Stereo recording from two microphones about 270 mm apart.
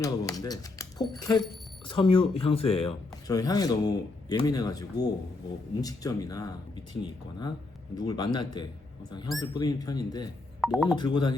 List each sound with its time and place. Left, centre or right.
0.0 s speech: centre
10.6 s speech: centre
10.8 s speech: centre